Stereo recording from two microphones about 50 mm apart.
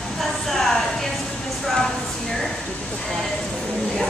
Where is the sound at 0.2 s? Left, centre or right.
Centre.